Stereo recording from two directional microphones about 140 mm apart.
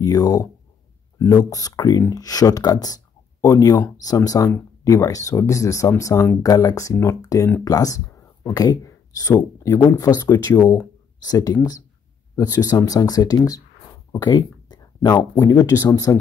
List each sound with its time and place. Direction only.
0.0 s speech: 25° left (ahead or behind)
14.1 s a sound: 30° left (ahead or behind)
15.3 s speech: 25° left (ahead or behind)